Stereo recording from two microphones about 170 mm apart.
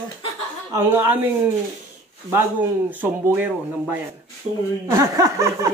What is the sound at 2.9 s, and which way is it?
Speech, 10° right (ahead or behind).